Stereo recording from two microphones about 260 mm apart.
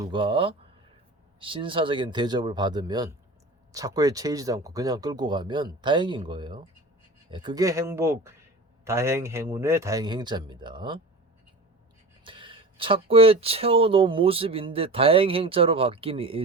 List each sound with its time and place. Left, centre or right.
0.0 s a man's voice: centre
12.2 s speech: centre